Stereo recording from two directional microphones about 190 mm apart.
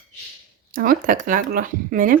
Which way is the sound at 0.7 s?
50° right (ahead or behind).